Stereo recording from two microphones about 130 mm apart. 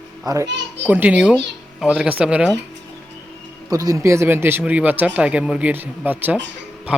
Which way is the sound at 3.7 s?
25° right (ahead or behind).